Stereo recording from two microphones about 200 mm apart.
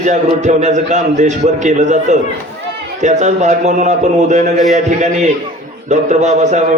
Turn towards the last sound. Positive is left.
turn(degrees=-35)  # may be behind; listen again after turning